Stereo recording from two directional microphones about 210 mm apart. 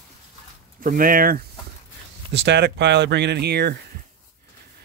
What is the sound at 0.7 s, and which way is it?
Speech, 40° right (ahead or behind).